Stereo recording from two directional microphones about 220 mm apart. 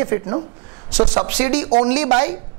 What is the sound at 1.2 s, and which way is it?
Speech, 10° right (ahead or behind).